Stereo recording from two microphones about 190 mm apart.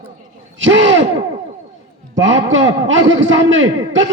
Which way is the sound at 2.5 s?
80° right.